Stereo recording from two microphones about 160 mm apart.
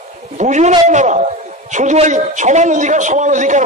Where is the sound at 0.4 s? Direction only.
50° right (ahead or behind).